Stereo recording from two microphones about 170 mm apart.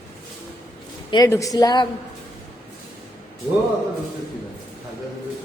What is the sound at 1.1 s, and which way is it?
Speech, 20° left (ahead or behind).